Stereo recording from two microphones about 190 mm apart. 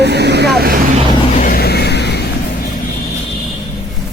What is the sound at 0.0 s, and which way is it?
Vehicle, 60° right (ahead or behind).